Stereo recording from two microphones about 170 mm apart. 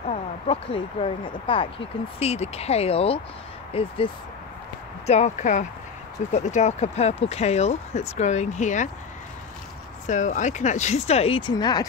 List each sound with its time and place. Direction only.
0.1 s speech: 35° left (ahead or behind)
10.0 s speech: 45° left (ahead or behind); by 11.9 s 25° left (ahead or behind)